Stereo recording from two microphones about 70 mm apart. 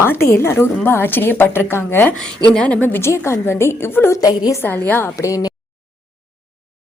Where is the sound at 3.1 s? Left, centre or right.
Left.